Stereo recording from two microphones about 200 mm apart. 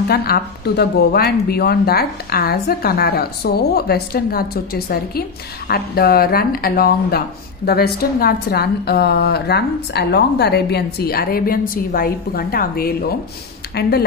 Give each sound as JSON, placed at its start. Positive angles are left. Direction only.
{"t": 0.1, "sound": "speech", "side_deg": 50}